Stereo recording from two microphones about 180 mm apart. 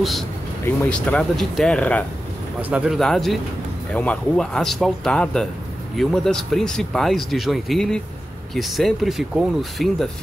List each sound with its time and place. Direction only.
0.7 s speech: 5° left (ahead or behind)